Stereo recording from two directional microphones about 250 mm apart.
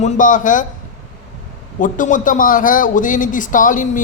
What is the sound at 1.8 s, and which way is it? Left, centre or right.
Speech, left.